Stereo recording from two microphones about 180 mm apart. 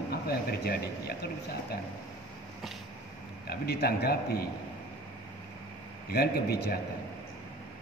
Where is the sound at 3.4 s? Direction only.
60° left (ahead or behind).